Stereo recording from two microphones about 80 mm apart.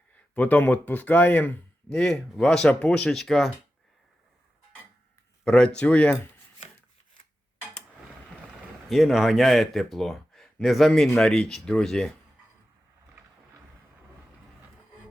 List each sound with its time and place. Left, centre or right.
0.3 s speech: centre
1.9 s speech: centre
5.5 s speech: centre
8.9 s speech: centre